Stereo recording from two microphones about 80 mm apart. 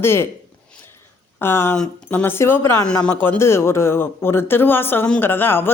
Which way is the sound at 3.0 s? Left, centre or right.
Centre.